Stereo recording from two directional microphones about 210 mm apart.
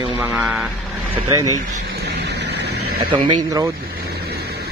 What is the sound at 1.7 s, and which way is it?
Vehicle, 50° right (ahead or behind).